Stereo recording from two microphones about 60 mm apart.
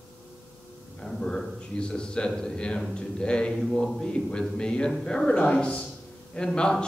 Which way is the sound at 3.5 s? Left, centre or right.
Centre.